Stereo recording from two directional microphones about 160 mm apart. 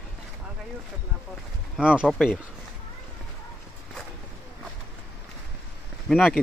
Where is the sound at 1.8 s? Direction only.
5° right (ahead or behind).